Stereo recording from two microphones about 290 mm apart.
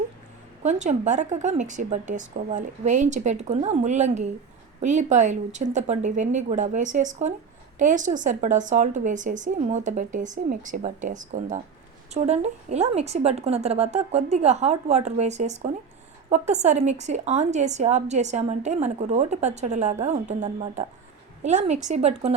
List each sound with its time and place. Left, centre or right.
0.6 s a woman's voice: right